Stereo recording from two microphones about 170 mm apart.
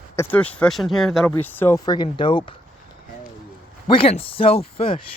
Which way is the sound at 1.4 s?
10° left (ahead or behind).